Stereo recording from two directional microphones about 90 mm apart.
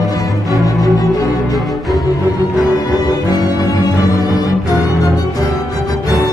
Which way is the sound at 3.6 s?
45° left (ahead or behind).